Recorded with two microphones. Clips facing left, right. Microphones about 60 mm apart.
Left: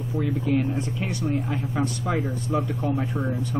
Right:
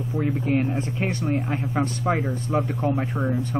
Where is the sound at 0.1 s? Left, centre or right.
Right.